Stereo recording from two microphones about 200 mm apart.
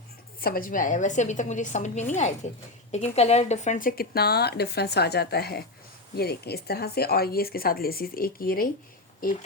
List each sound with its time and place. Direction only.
0.3 s a woman's voice: 45° left (ahead or behind)